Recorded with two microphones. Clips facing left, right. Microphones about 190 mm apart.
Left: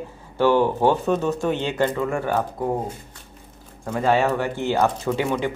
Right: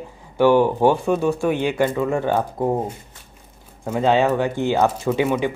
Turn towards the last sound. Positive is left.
turn(degrees=-15)  # may be behind; listen again after turning